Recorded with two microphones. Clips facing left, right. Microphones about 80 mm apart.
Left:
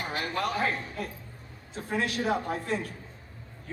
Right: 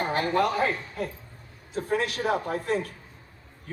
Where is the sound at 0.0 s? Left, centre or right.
Right.